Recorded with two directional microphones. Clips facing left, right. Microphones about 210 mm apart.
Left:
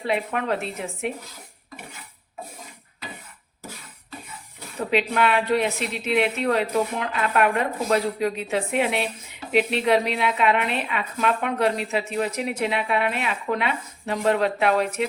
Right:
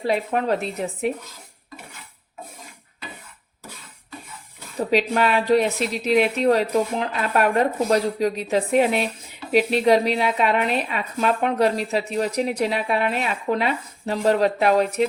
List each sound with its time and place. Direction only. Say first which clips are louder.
0.0 s a woman's voice: right 3 dB; 35° right (ahead or behind)
4.9 s a woman's voice: right 1 dB; 40° right (ahead or behind)